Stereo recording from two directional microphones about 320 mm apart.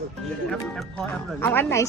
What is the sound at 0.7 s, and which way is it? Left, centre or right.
A woman's voice, centre.